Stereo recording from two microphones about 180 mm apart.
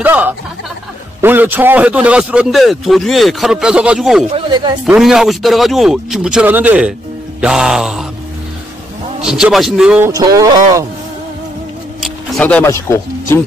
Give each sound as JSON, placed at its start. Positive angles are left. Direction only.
{"t": 0.0, "sound": "a man's voice", "side_deg": -10}
{"t": 4.3, "sound": "speech", "side_deg": -25}
{"t": 4.8, "sound": "a man's voice", "side_deg": -5}
{"t": 9.2, "sound": "a man's voice", "side_deg": -5}
{"t": 12.0, "sound": "speech", "side_deg": 5}